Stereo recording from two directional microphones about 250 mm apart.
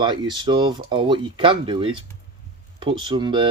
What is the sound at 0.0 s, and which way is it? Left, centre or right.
Speech, centre.